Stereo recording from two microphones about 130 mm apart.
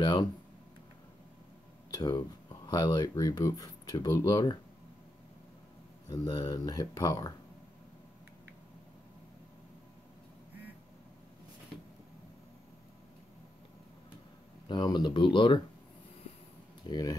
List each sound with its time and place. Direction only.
0.0 s speech: 35° left (ahead or behind)
1.9 s speech: 35° left (ahead or behind)
6.0 s speech: 25° left (ahead or behind)
14.7 s speech: 35° left (ahead or behind)
16.9 s speech: 40° left (ahead or behind)